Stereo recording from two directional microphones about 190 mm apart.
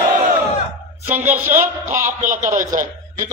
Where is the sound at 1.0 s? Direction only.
10° right (ahead or behind).